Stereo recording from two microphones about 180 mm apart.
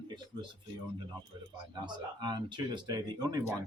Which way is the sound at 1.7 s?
25° right (ahead or behind).